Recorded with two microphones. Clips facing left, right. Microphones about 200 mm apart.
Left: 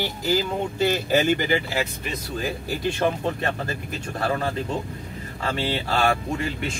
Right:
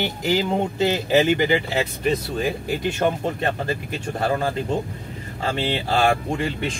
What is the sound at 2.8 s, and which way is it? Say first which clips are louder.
Speech: even; 20° right (ahead or behind).